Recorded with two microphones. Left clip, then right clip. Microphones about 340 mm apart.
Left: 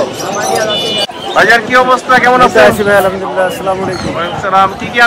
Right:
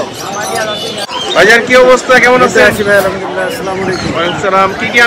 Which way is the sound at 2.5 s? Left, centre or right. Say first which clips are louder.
Left 1 dB; left.